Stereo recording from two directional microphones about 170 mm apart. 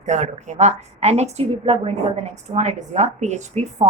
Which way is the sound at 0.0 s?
45° right (ahead or behind).